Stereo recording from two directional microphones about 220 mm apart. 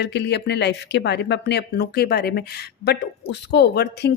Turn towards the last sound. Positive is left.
turn(degrees=50)  # may be behind; listen again after turning